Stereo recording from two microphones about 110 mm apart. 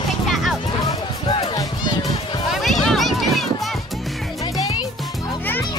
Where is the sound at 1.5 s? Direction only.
40° left (ahead or behind).